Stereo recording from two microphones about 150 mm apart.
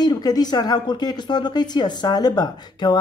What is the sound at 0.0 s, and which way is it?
Speech, 25° left (ahead or behind).